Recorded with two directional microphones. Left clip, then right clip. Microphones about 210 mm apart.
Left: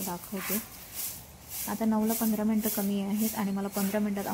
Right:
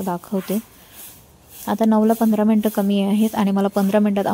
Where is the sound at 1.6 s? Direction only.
45° right (ahead or behind).